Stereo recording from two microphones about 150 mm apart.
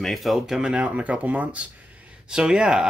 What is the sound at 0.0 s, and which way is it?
Speech, centre (ahead or behind).